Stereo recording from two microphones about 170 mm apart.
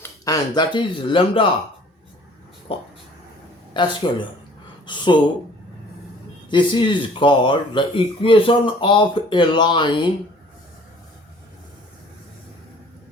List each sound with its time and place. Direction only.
0.0 s speech: 20° left (ahead or behind)
2.7 s a sound: 35° left (ahead or behind)
3.8 s speech: 25° left (ahead or behind)
6.5 s speech: 30° left (ahead or behind)